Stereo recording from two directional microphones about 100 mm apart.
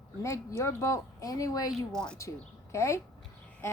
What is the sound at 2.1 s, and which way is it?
Speech, 30° left (ahead or behind).